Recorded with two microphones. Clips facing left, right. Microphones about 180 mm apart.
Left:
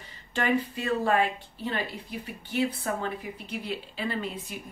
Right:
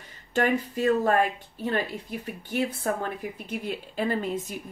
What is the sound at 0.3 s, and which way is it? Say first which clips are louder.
Speech: right 2 dB; 45° right (ahead or behind).